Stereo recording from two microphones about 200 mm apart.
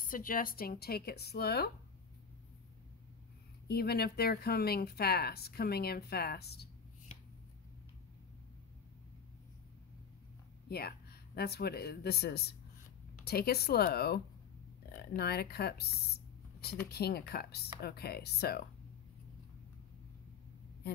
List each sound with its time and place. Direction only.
0.0 s speech: 45° left (ahead or behind)
3.6 s speech: 50° left (ahead or behind)
10.7 s speech: 50° left (ahead or behind)